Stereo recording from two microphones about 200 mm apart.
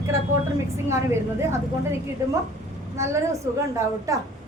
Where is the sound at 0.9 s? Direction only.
15° right (ahead or behind).